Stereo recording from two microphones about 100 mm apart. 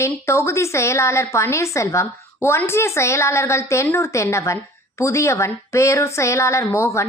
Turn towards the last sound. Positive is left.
turn(degrees=30)  # may be behind; listen again after turning